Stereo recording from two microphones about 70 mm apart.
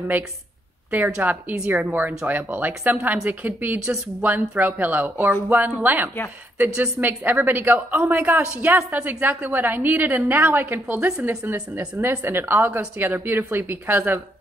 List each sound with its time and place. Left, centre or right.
1.1 s a woman's voice: centre